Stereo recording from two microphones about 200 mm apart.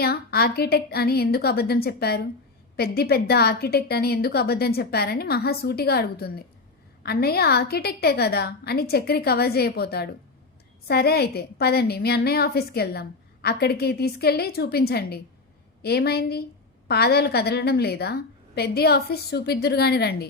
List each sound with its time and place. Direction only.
0.0 s a woman's voice: 50° left (ahead or behind)